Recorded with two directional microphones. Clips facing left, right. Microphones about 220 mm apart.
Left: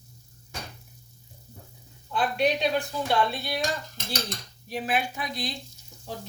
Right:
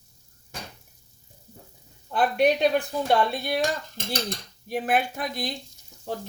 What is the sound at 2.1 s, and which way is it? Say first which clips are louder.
A woman's voice: right 4 dB; 55° right (ahead or behind).